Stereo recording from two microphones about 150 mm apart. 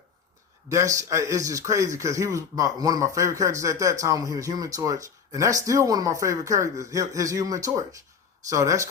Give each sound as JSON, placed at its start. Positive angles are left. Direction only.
{"t": 0.7, "sound": "a man's voice", "side_deg": -20}